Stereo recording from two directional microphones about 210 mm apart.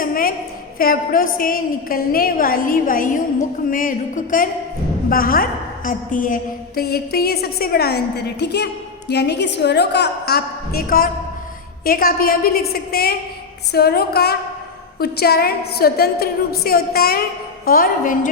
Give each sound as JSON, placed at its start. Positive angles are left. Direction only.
{"t": 0.0, "sound": "a sound", "side_deg": 45}
{"t": 0.8, "sound": "a woman's voice", "side_deg": 40}
{"t": 3.7, "sound": "music", "side_deg": 40}
{"t": 5.0, "sound": "a woman's voice", "side_deg": 45}
{"t": 17.7, "sound": "music", "side_deg": 45}